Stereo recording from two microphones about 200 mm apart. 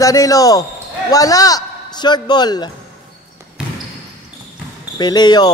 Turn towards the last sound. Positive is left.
turn(degrees=20)  # may be behind; listen again after turning